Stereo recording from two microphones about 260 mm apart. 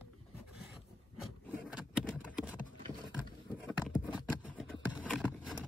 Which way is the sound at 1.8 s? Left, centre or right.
Centre.